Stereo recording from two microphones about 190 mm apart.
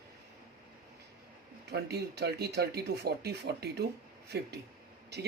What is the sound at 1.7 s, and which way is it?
Speech, 60° right (ahead or behind).